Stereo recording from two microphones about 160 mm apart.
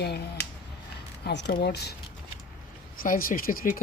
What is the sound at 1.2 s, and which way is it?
Speech, 85° left.